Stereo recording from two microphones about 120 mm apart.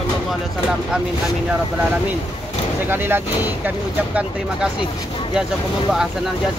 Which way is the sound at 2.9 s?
20° right (ahead or behind).